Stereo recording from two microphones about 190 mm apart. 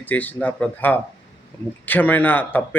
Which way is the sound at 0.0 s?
10° left (ahead or behind).